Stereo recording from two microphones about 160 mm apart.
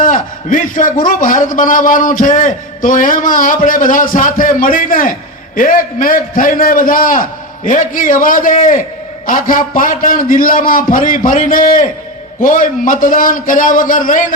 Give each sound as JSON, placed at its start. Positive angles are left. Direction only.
{"t": 0.0, "sound": "a man's voice", "side_deg": 55}